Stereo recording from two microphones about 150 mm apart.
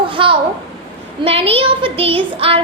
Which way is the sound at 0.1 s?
35° right (ahead or behind).